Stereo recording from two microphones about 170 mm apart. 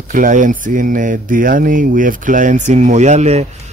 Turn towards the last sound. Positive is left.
turn(degrees=-40)  # may be behind; listen again after turning